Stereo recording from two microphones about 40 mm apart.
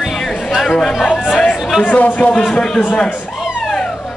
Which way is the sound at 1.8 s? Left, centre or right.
Left.